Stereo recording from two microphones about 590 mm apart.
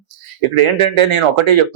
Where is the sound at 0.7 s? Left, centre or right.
Right.